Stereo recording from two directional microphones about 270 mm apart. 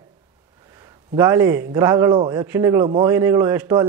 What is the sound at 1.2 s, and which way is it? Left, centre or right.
A man's voice, centre.